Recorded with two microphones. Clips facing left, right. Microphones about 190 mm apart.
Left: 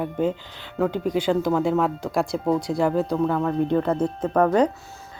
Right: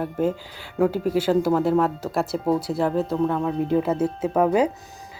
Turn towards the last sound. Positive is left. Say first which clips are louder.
# left 1 dB
turn(degrees=-5)  # may be behind; listen again after turning